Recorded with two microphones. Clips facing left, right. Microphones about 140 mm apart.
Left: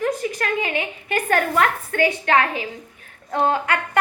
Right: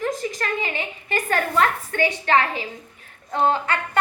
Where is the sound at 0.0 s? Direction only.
60° left (ahead or behind).